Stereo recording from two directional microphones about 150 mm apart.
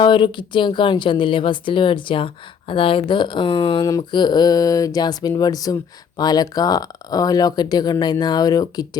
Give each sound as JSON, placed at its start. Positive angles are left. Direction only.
{"t": 0.0, "sound": "a woman's voice", "side_deg": 35}